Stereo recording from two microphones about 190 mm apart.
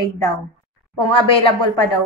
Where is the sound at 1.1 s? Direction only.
25° left (ahead or behind).